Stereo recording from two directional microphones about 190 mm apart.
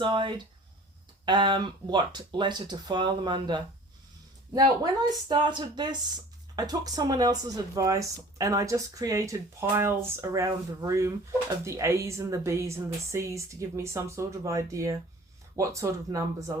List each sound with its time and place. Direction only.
0.0 s speech: 25° right (ahead or behind)
5.3 s speech: 25° right (ahead or behind)